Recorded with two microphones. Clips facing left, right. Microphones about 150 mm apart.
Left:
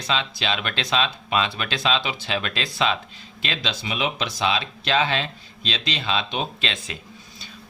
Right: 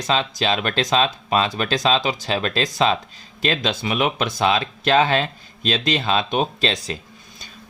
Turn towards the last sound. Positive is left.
turn(degrees=-40)  # may be behind; listen again after turning